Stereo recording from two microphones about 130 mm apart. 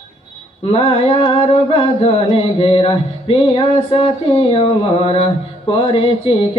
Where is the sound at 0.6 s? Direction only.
45° left (ahead or behind).